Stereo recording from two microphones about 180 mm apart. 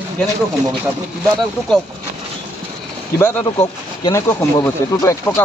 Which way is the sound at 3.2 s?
10° left (ahead or behind).